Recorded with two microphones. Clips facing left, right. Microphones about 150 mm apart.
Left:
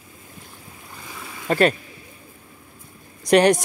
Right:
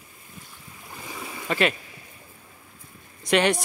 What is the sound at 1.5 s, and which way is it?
Speech, 40° left (ahead or behind).